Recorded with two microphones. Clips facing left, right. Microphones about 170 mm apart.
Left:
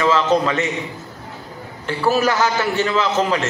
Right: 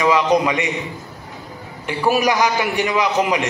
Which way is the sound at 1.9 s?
15° right (ahead or behind).